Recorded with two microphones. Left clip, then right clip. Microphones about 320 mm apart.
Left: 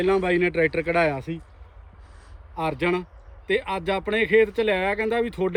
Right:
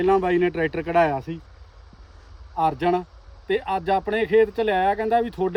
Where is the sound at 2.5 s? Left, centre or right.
Centre.